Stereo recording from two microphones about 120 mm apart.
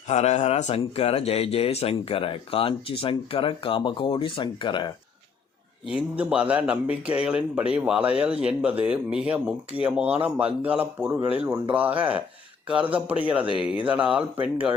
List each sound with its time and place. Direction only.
0.1 s speech: 65° left (ahead or behind); by 4.9 s 40° left (ahead or behind)
5.9 s speech: 10° right (ahead or behind)